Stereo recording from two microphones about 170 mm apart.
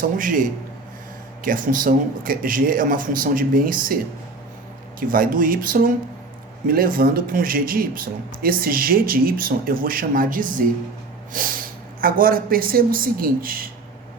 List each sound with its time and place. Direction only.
0.0 s a man's voice: 55° right (ahead or behind)
4.9 s speech: 55° right (ahead or behind)